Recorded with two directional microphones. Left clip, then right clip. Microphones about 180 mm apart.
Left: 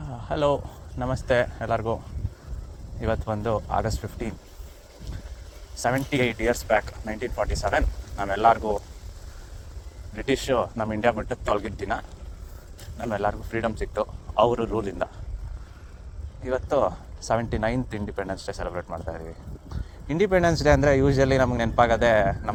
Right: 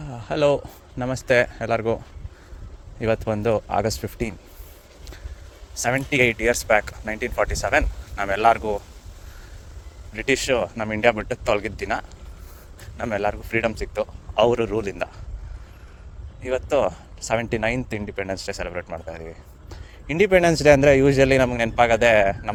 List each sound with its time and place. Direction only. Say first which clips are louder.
0.1 s speech: right 4 dB; 40° right (ahead or behind)
3.0 s speech: right 5 dB; 40° right (ahead or behind)
5.7 s speech: right 3 dB; 40° right (ahead or behind)
10.2 s speech: right 3 dB; 45° right (ahead or behind)
13.1 s speech: right 2 dB; 40° right (ahead or behind)
16.4 s speech: right 2 dB; 45° right (ahead or behind)